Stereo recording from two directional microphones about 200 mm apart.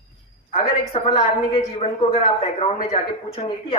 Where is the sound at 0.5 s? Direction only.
25° left (ahead or behind).